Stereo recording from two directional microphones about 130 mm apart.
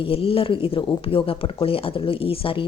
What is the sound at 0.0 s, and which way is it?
Speech, 45° left (ahead or behind).